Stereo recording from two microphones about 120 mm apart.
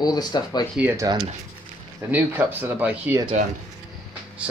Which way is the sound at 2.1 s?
15° right (ahead or behind).